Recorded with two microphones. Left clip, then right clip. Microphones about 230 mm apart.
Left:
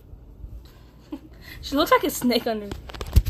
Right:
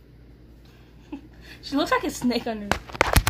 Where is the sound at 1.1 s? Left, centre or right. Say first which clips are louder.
Left 2 dB; left.